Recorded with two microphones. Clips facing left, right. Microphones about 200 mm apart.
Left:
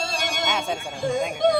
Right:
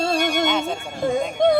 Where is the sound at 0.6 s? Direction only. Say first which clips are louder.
Right 3 dB; 60° right (ahead or behind).